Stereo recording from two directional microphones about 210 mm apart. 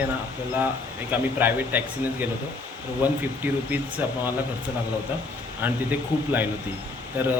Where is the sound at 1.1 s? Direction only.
10° right (ahead or behind).